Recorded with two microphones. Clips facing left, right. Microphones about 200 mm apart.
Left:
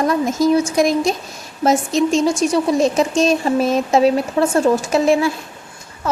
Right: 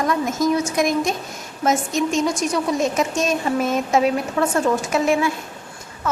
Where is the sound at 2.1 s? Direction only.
30° left (ahead or behind).